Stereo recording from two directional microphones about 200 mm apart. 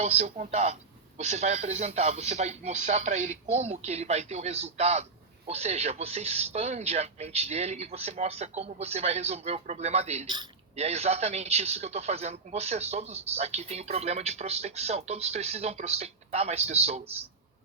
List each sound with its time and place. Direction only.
0.0 s speech: 35° right (ahead or behind)